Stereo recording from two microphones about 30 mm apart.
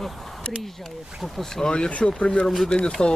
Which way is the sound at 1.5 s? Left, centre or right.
Left.